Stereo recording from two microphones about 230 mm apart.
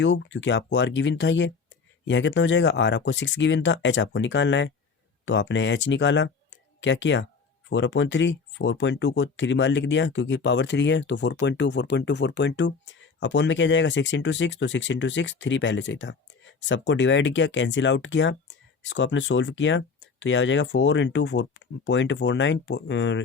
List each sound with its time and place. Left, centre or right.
0.0 s speech: left